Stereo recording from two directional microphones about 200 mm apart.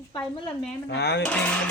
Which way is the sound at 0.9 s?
55° left (ahead or behind).